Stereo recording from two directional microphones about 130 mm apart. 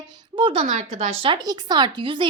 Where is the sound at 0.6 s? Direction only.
55° right (ahead or behind).